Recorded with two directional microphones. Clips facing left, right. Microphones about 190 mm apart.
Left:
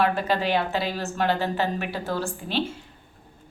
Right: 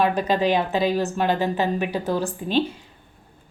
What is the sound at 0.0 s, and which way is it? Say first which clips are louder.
A woman's voice: right 3 dB; 15° right (ahead or behind).